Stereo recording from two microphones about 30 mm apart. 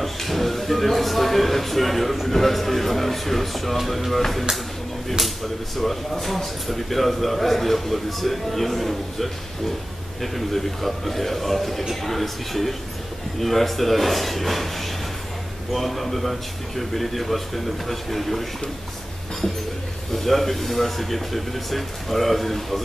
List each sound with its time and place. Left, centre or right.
0.0 s speech: centre
5.8 s speech: centre
15.7 s speech: centre
20.2 s speech: centre